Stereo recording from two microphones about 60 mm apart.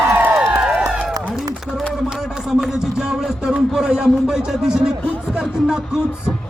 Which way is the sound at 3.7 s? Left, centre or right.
Centre.